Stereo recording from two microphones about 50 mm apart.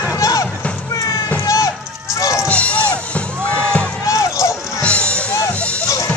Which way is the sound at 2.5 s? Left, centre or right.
Left.